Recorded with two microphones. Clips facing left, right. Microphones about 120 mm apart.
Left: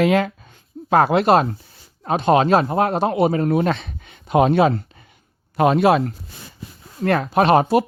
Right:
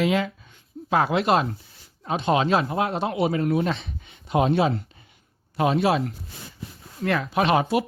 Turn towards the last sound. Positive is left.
turn(degrees=40)  # may be behind; listen again after turning